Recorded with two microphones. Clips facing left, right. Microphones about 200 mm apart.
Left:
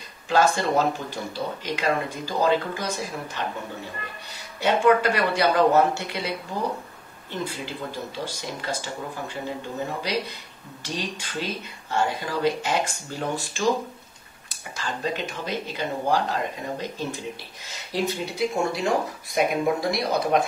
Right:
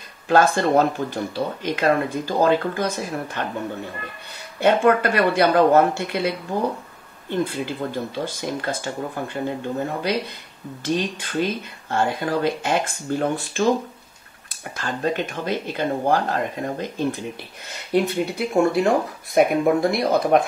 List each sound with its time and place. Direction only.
0.3 s speech: 55° right (ahead or behind)
4.6 s speech: 55° right (ahead or behind)
14.8 s speech: 55° right (ahead or behind)